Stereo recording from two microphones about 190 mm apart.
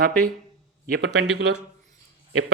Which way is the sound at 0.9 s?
55° right (ahead or behind).